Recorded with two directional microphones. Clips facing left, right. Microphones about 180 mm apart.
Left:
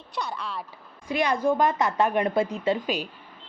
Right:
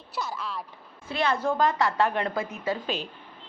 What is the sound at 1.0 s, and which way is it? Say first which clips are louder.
A woman's voice: left 3 dB; 15° left (ahead or behind).